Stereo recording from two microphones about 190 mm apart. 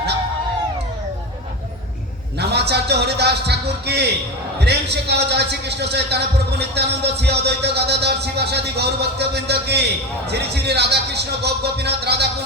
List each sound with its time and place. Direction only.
2.4 s a man's voice: 60° right (ahead or behind)